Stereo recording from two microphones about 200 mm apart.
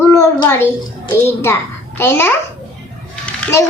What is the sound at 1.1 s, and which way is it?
A child's voice, 10° left (ahead or behind).